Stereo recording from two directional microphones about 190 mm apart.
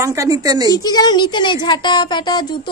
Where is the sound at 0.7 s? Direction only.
20° left (ahead or behind).